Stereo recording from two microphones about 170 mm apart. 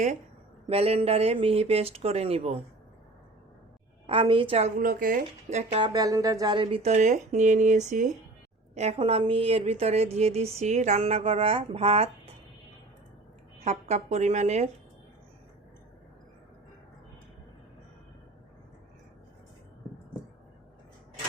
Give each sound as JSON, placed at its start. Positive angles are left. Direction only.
{"t": 0.7, "sound": "a woman's voice", "side_deg": -35}
{"t": 4.0, "sound": "a woman's voice", "side_deg": -30}
{"t": 5.9, "sound": "a woman's voice", "side_deg": -20}
{"t": 13.7, "sound": "a woman's voice", "side_deg": -40}